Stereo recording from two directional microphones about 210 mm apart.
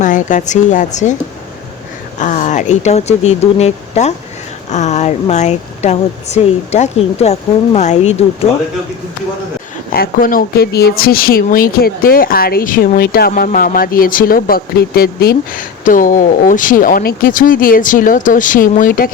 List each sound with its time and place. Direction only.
0.0 s speech: 35° left (ahead or behind)
2.1 s speech: 35° left (ahead or behind)
9.9 s speech: 45° left (ahead or behind)